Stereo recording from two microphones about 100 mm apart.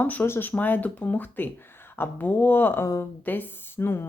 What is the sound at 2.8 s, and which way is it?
Speech, 30° left (ahead or behind).